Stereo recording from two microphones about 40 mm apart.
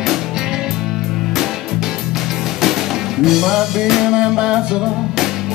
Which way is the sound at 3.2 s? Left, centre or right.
Centre.